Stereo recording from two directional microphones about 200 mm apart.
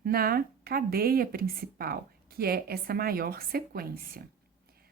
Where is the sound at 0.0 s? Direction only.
50° right (ahead or behind).